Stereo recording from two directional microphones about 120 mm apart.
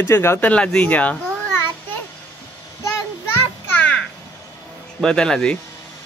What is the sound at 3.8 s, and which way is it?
Crow, 15° left (ahead or behind).